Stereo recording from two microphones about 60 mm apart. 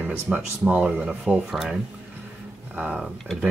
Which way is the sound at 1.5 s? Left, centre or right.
Centre.